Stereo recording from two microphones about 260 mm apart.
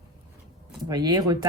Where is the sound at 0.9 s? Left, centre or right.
Centre.